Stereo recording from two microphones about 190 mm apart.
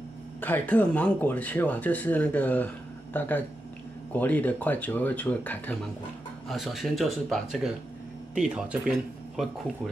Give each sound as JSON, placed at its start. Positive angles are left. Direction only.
{"t": 0.4, "sound": "speech", "side_deg": 10}